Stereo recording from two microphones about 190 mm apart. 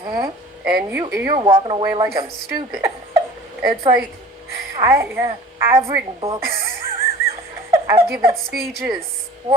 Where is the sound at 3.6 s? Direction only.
25° right (ahead or behind).